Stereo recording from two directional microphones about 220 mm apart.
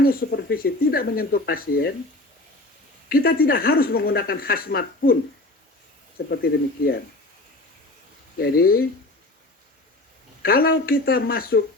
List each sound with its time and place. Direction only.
0.0 s speech: 40° left (ahead or behind)
3.1 s speech: 40° left (ahead or behind)
6.3 s speech: 45° left (ahead or behind)
8.4 s speech: 45° left (ahead or behind)
10.4 s speech: 40° left (ahead or behind)